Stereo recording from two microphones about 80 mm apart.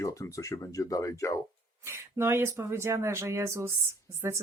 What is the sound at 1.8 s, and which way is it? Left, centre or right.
Speech, right.